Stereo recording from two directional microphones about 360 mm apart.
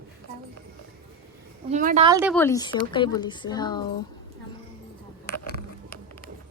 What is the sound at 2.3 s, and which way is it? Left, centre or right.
Speech, centre.